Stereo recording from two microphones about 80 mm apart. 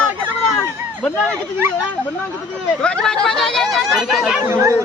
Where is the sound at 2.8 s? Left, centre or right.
Centre.